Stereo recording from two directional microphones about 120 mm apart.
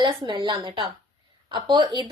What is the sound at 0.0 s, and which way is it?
A woman's voice, 40° right (ahead or behind).